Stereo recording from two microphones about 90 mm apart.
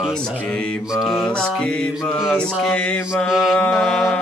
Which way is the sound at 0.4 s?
10° left (ahead or behind).